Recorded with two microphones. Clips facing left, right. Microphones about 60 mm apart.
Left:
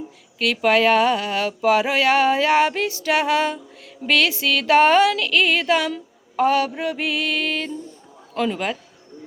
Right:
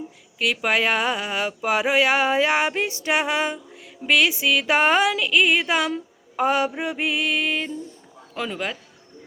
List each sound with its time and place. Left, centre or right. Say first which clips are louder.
0.3 s speech: left 4 dB; centre
4.0 s a sound: even; centre
8.4 s a man's voice: left 5 dB; centre